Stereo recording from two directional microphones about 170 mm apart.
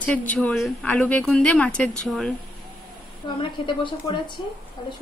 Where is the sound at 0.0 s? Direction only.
10° left (ahead or behind).